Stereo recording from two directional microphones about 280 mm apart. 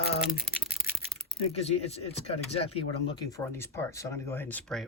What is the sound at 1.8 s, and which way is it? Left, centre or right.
Speech, left.